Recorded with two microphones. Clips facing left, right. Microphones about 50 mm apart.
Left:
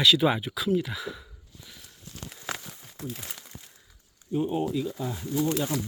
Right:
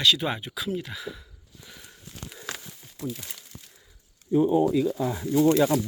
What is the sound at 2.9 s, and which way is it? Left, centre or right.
Speech, left.